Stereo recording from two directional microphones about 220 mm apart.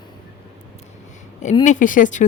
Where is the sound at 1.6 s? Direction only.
35° left (ahead or behind).